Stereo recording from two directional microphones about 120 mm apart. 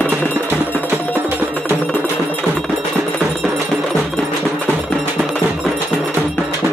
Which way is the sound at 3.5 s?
Centre (ahead or behind).